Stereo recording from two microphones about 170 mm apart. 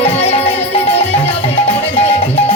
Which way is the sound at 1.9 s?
35° left (ahead or behind).